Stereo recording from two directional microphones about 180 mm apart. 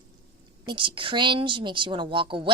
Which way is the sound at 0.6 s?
25° right (ahead or behind).